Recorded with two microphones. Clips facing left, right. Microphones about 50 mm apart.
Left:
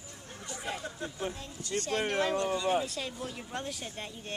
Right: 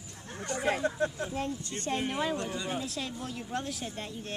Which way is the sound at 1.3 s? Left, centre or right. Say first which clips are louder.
Right 6 dB; right.